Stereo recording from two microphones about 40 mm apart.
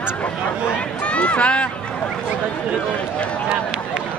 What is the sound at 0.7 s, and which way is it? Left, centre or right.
Run, left.